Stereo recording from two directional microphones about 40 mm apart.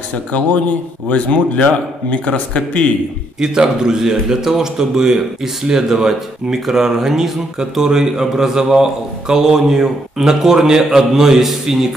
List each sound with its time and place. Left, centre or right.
0.1 s speech: left
3.3 s a man's voice: centre